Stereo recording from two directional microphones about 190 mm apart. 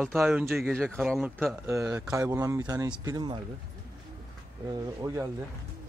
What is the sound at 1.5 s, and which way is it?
Speech, 15° right (ahead or behind).